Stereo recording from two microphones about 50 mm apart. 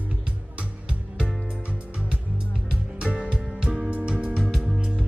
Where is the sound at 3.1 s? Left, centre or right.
Right.